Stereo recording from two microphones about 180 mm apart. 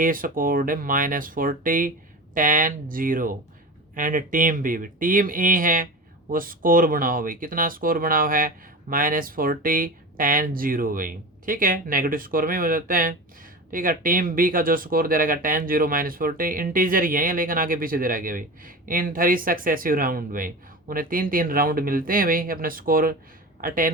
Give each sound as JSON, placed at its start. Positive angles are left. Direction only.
{"t": 0.0, "sound": "speech", "side_deg": -50}